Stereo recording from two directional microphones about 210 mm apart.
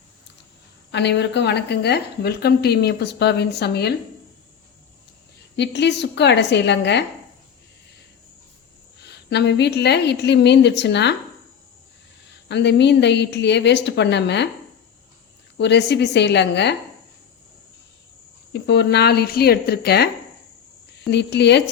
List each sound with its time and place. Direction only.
0.9 s a woman's voice: 55° left (ahead or behind)
5.5 s a woman's voice: 55° left (ahead or behind)
9.0 s a woman's voice: 55° left (ahead or behind)
12.5 s a woman's voice: 55° left (ahead or behind)
15.5 s a woman's voice: 55° left (ahead or behind)
18.5 s a woman's voice: 55° left (ahead or behind)
21.1 s a woman's voice: 55° left (ahead or behind)